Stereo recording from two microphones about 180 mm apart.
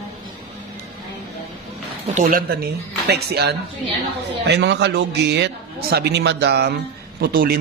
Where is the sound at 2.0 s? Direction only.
40° right (ahead or behind).